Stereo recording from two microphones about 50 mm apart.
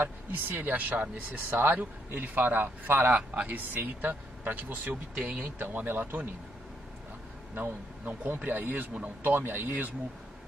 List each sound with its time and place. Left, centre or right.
0.0 s speech: right
3.2 s speech: right
7.5 s speech: right